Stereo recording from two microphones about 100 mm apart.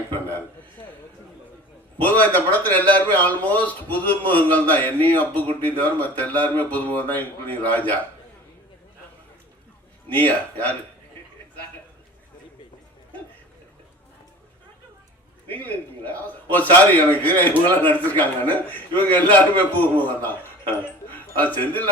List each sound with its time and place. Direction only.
2.0 s a man's voice: 15° left (ahead or behind)
10.1 s a man's voice: 15° left (ahead or behind)
16.0 s a man's voice: 15° left (ahead or behind)